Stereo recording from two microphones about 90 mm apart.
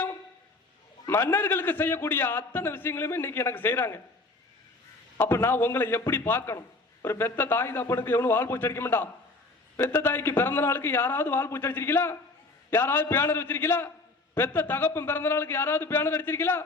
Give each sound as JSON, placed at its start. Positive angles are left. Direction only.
{"t": 1.0, "sound": "a man's voice", "side_deg": 25}
{"t": 5.2, "sound": "a man's voice", "side_deg": 25}